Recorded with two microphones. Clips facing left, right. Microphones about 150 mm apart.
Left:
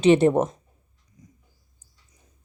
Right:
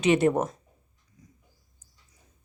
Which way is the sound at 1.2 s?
20° left (ahead or behind).